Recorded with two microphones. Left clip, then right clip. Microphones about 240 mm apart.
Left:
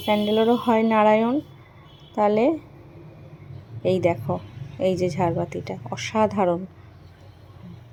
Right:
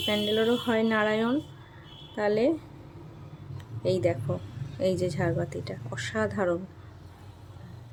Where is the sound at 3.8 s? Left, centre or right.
Centre.